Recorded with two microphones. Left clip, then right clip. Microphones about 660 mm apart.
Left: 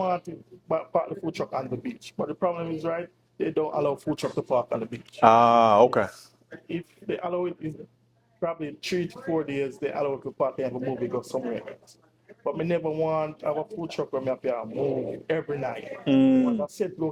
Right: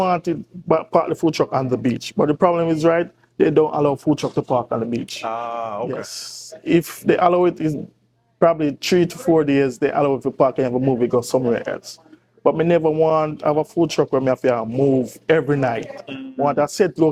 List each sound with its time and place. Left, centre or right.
0.7 s speech: right
5.2 s speech: left
6.7 s speech: right
8.4 s speech: right
16.0 s speech: left
16.6 s speech: right